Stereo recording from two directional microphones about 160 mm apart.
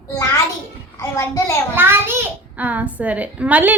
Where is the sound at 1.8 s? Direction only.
15° right (ahead or behind).